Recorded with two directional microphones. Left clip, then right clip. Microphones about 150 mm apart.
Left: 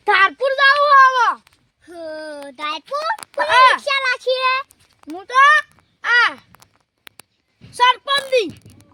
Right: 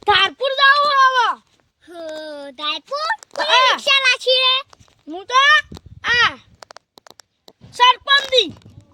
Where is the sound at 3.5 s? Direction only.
90° right.